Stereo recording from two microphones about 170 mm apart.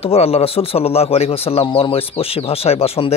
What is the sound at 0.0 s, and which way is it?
A man's voice, 35° left (ahead or behind).